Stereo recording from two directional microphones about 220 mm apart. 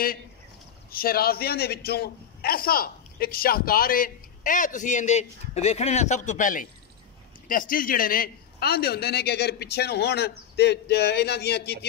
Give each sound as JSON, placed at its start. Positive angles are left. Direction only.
{"t": 0.9, "sound": "a man's voice", "side_deg": 45}